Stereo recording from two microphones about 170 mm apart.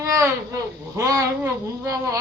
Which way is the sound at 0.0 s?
20° right (ahead or behind).